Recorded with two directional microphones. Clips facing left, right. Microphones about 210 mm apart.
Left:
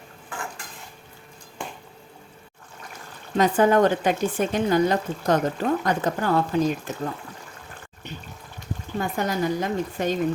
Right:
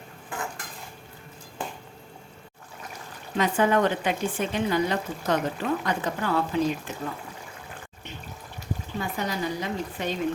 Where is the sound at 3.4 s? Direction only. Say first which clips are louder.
Left 4 dB; 40° left (ahead or behind).